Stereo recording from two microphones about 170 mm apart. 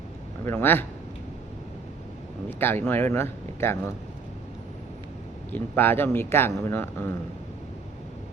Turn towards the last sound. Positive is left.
turn(degrees=15)  # may be behind; listen again after turning